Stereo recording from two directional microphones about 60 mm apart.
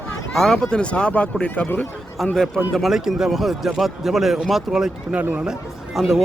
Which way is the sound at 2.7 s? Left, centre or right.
Centre.